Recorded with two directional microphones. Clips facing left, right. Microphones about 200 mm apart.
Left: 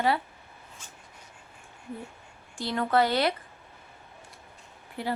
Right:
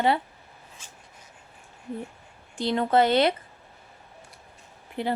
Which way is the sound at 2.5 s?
20° right (ahead or behind).